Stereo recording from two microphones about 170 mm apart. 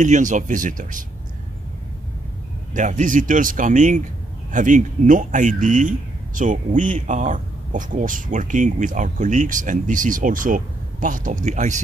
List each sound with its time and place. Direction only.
0.0 s speech: 45° right (ahead or behind)
2.7 s speech: 50° right (ahead or behind)